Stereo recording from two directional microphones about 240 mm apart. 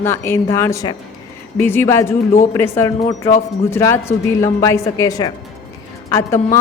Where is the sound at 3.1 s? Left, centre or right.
Left.